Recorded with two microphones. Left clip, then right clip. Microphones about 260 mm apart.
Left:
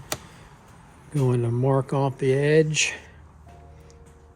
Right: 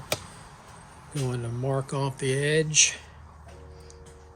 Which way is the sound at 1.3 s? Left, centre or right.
Left.